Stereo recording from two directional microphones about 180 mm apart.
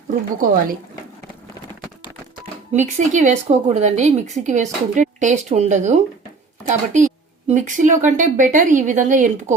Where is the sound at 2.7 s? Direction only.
40° right (ahead or behind).